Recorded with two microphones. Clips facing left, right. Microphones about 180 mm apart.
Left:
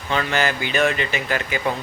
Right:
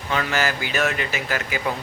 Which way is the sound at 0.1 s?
5° right (ahead or behind).